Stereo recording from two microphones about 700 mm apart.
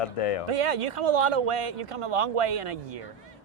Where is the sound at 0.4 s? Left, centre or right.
Right.